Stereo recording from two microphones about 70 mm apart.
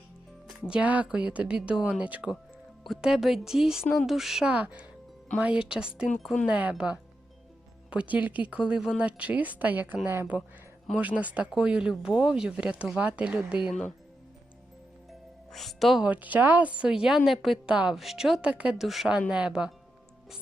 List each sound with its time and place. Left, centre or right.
0.7 s speech: right
2.8 s speech: centre
4.5 s a woman's voice: right
15.5 s speech: centre
16.0 s speech: right
18.8 s speech: centre